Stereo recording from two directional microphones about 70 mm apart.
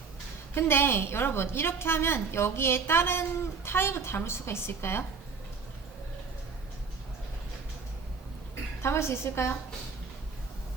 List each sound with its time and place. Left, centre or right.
0.5 s a woman's voice: left
8.8 s a woman's voice: left